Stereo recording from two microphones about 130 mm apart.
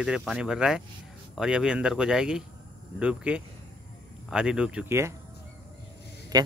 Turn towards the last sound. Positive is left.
turn(degrees=-30)  # may be behind; listen again after turning